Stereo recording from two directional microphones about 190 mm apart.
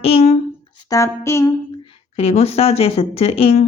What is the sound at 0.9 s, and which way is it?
Speech, 15° left (ahead or behind).